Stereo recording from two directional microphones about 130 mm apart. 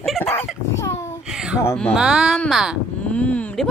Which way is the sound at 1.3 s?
5° right (ahead or behind).